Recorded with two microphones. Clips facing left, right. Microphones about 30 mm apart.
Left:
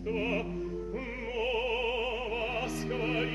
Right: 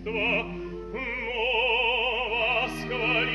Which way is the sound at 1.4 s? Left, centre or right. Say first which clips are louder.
Right 6 dB; right.